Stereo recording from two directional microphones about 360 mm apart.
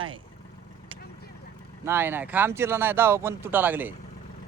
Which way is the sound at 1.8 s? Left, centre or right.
Centre.